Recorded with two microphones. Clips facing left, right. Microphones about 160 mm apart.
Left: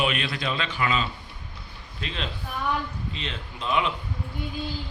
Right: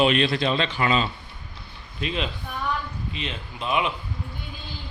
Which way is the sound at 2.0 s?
15° right (ahead or behind).